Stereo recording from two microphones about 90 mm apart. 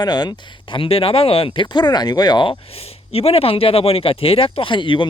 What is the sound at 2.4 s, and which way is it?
Speech, 90° left.